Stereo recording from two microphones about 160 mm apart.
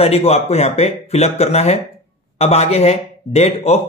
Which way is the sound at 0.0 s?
40° left (ahead or behind).